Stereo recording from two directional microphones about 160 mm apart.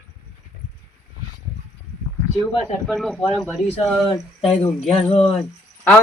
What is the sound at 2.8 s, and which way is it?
Speech, 5° left (ahead or behind).